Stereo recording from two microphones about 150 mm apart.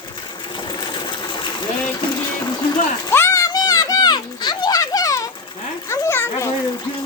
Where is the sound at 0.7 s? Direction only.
30° left (ahead or behind).